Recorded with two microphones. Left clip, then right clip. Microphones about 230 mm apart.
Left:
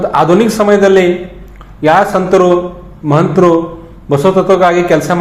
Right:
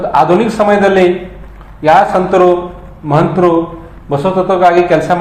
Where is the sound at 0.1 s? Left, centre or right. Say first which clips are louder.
Right 2 dB; left.